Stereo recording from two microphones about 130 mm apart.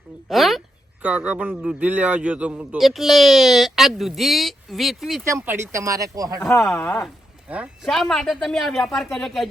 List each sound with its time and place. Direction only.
0.3 s a sound: centre (ahead or behind)
1.0 s a man's voice: 10° right (ahead or behind)
5.2 s speech: 20° right (ahead or behind)
6.4 s speech: 15° left (ahead or behind)
7.4 s a man's voice: 10° right (ahead or behind)